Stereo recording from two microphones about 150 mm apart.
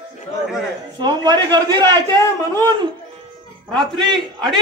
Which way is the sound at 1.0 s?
30° right (ahead or behind).